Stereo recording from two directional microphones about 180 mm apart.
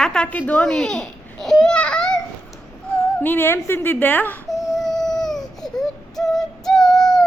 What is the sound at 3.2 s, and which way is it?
Speech, 10° left (ahead or behind).